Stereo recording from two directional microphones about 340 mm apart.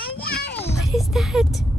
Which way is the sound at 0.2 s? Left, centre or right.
Left.